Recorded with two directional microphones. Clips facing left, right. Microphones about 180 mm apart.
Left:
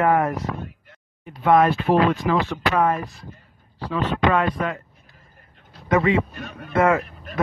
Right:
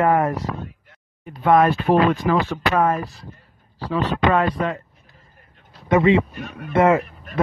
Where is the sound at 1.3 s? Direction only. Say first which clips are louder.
Right 1 dB; 45° right (ahead or behind).